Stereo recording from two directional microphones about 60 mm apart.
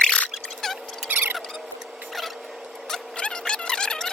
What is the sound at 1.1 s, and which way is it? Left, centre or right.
Mouse, right.